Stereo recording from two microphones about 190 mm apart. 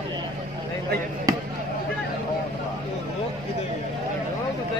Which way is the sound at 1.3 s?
20° right (ahead or behind).